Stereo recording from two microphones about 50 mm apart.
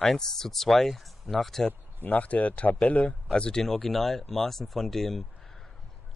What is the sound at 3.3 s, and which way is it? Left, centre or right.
Speech, centre.